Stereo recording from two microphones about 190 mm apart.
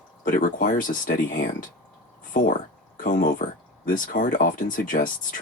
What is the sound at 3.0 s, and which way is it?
Speech, 45° left (ahead or behind).